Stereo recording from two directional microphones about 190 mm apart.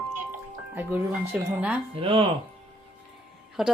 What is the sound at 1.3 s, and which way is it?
Speech, 10° right (ahead or behind).